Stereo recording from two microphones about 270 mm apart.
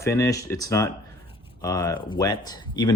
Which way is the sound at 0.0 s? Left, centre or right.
Centre.